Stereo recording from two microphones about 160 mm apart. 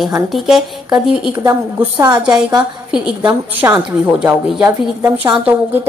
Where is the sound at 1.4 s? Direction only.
15° right (ahead or behind).